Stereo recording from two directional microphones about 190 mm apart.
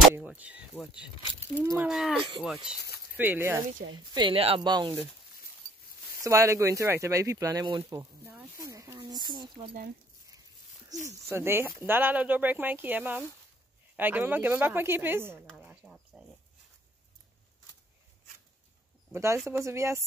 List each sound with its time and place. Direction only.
0.1 s speech: 10° right (ahead or behind)
1.9 s speech: centre (ahead or behind)
4.1 s speech: 25° right (ahead or behind)
6.2 s speech: 15° right (ahead or behind)
8.3 s a sound: 10° right (ahead or behind)
8.6 s speech: 15° right (ahead or behind)
11.2 s speech: 15° right (ahead or behind)
19.1 s speech: 15° right (ahead or behind)